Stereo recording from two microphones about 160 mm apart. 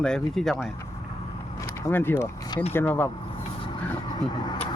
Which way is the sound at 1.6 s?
15° left (ahead or behind).